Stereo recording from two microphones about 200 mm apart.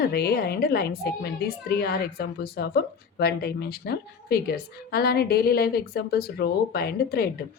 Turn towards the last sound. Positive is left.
turn(degrees=50)  # may be behind; listen again after turning